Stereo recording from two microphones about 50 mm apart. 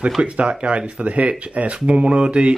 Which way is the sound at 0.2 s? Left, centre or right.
Right.